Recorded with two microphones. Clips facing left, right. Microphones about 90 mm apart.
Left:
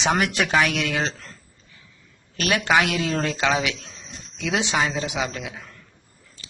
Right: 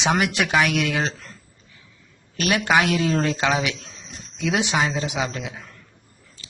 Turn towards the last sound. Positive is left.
turn(degrees=-25)  # may be behind; listen again after turning